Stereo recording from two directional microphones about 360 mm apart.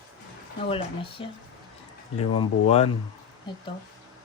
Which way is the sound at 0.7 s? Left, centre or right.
Centre.